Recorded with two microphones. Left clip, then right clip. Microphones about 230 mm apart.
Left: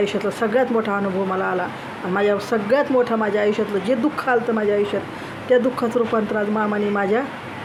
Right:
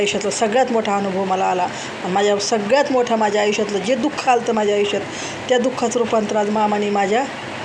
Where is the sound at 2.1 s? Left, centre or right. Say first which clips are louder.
Right 2 dB; centre.